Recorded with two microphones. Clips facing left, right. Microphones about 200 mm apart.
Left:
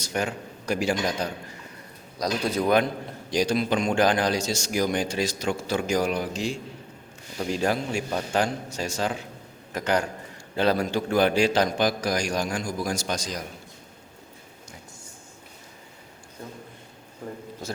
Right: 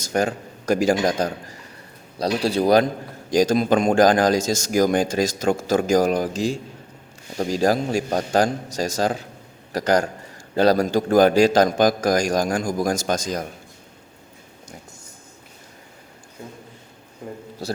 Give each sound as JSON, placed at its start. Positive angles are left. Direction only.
{"t": 0.0, "sound": "speech", "side_deg": -45}
{"t": 2.1, "sound": "a man's voice", "side_deg": -30}
{"t": 3.2, "sound": "a man's voice", "side_deg": -45}